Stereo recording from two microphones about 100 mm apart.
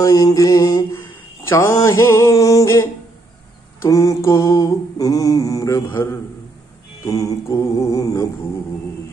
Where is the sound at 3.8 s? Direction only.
35° left (ahead or behind).